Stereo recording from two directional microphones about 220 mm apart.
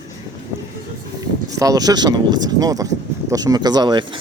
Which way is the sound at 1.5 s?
15° right (ahead or behind).